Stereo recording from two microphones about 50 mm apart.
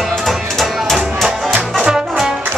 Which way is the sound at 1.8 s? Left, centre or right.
Centre.